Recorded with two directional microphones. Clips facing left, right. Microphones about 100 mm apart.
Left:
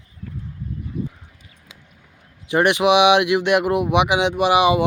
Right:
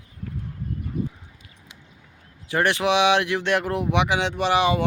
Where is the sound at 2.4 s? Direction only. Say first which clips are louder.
Left 5 dB; 15° left (ahead or behind).